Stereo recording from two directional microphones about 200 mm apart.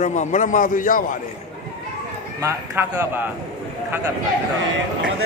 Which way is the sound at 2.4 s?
15° right (ahead or behind).